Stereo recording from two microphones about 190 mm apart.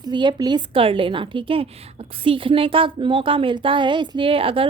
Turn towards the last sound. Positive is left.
turn(degrees=-30)  # may be behind; listen again after turning